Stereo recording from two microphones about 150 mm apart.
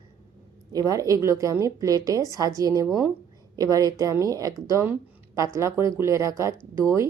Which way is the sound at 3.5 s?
25° right (ahead or behind).